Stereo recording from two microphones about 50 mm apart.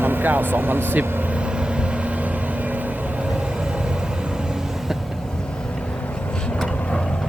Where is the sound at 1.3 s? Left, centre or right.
Right.